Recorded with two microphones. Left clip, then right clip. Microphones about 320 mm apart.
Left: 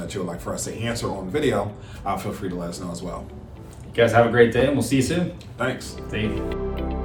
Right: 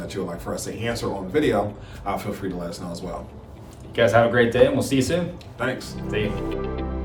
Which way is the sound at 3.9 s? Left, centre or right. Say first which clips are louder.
Even; centre.